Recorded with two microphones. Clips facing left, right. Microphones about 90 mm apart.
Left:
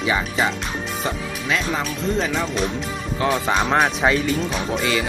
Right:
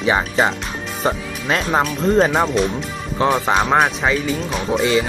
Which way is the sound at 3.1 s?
30° right (ahead or behind).